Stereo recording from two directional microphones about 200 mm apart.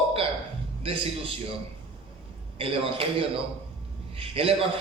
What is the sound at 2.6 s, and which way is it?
A man's voice, 25° right (ahead or behind).